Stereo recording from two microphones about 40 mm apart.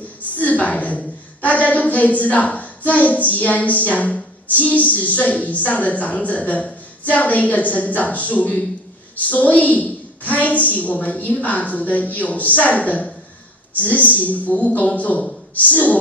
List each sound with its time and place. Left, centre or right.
0.4 s a woman's voice: left